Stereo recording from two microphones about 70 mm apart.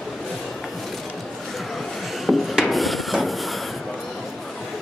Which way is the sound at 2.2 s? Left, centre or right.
Centre.